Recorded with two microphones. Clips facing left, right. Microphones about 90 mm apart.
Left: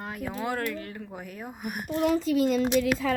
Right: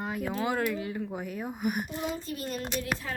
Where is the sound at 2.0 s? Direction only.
90° left.